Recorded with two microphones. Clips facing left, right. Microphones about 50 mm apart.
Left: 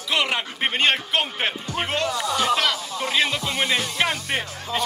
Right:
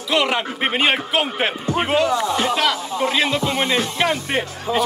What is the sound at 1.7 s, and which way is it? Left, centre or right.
Music, centre.